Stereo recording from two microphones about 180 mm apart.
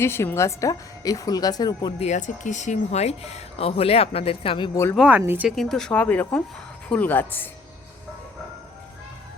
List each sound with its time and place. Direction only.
0.0 s speech: 15° left (ahead or behind)
2.0 s speech: 40° left (ahead or behind)
4.9 s speech: 10° right (ahead or behind)
5.5 s speech: centre (ahead or behind)